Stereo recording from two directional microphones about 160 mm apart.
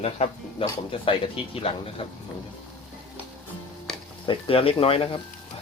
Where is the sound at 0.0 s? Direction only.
40° left (ahead or behind).